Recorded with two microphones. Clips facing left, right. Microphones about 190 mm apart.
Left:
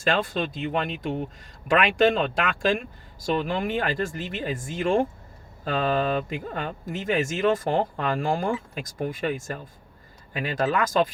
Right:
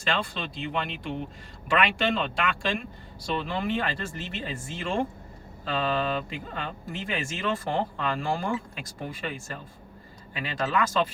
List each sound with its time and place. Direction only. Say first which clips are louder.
0.0 s speech: left 6 dB; 45° left (ahead or behind)